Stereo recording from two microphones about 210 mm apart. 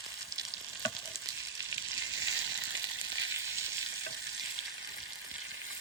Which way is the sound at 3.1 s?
65° right (ahead or behind).